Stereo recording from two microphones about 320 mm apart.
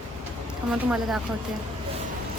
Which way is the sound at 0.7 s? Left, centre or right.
Centre.